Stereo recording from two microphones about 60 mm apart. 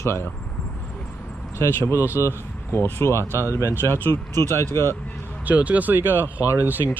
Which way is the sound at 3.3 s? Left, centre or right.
Right.